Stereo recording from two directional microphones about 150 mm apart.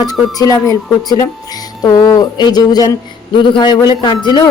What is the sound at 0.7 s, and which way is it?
Speech, 25° left (ahead or behind).